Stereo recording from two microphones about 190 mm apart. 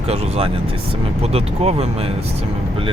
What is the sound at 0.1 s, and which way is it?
Speech, 30° right (ahead or behind).